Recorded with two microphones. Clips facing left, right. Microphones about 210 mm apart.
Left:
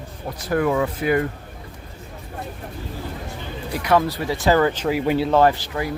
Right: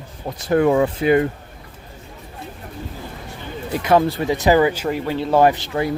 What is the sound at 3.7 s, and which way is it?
Speech, 25° right (ahead or behind).